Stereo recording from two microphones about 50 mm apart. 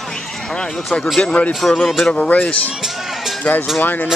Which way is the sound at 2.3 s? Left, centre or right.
Left.